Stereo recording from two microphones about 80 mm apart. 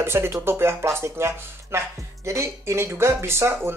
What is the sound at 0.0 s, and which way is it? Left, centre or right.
Speech, right.